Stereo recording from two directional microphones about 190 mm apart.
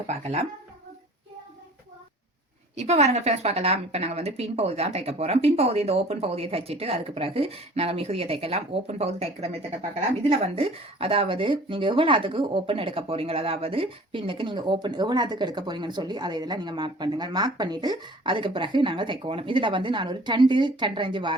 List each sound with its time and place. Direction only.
0.1 s a woman's voice: 35° right (ahead or behind)
2.7 s a woman's voice: 35° right (ahead or behind)